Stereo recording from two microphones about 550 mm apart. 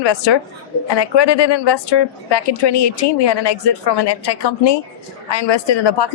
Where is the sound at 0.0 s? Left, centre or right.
Left.